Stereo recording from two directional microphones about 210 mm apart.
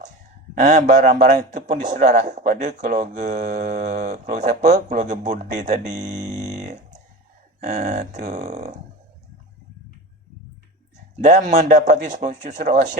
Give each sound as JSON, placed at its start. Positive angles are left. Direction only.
{"t": 0.6, "sound": "speech", "side_deg": -35}
{"t": 11.2, "sound": "speech", "side_deg": -35}